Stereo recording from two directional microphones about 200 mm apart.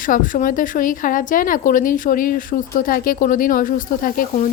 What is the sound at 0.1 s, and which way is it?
A woman's voice, 40° left (ahead or behind).